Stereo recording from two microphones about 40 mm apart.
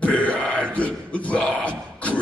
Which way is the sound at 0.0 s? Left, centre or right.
Left.